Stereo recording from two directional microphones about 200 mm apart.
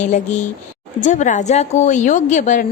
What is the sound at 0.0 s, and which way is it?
Speech, 35° left (ahead or behind).